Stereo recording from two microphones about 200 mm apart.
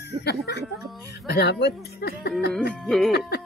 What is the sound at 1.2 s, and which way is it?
Speech, 55° left (ahead or behind).